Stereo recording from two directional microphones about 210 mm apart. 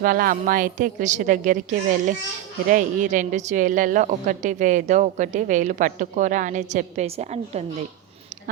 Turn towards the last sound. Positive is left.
turn(degrees=-30)  # may be behind; listen again after turning